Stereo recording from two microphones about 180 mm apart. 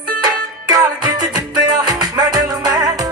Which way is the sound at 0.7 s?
20° right (ahead or behind).